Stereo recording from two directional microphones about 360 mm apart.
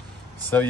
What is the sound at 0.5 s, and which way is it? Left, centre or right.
Speech, centre.